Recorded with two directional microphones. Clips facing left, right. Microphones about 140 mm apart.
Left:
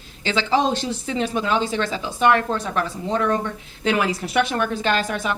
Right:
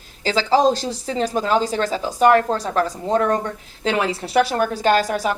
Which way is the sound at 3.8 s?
30° right (ahead or behind).